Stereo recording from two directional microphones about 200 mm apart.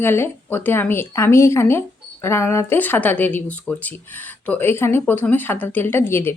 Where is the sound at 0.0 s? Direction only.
10° left (ahead or behind).